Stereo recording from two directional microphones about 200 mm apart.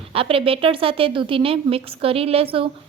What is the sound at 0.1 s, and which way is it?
A woman's voice, 30° right (ahead or behind).